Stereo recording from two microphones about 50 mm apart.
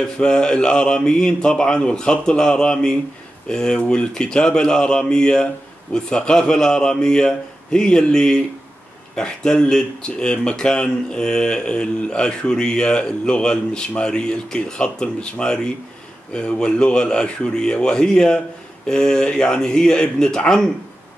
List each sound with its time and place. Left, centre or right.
0.0 s speech: centre